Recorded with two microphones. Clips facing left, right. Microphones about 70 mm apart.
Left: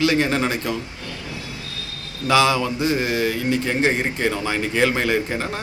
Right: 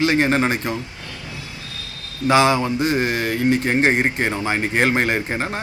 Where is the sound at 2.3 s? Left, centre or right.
Right.